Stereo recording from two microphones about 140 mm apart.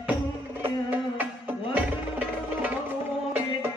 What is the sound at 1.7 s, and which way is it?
Music, 10° right (ahead or behind).